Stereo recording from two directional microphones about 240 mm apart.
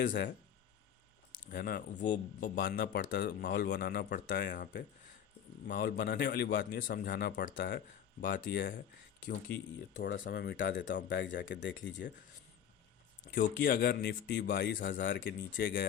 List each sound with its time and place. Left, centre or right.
1.5 s speech: left
9.7 s speech: left
13.3 s speech: left